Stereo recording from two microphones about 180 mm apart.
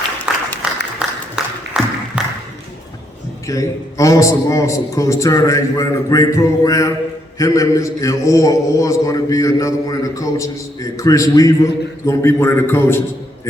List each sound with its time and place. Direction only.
0.3 s applause: 5° right (ahead or behind)
1.0 s a sound: 5° right (ahead or behind)
3.4 s a man's voice: 15° left (ahead or behind)